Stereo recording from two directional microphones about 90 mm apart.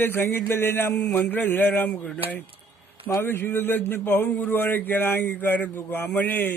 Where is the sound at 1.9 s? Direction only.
10° left (ahead or behind).